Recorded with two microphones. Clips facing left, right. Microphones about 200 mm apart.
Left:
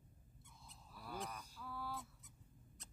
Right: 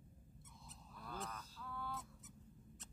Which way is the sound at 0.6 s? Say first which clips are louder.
Even; 5° left (ahead or behind).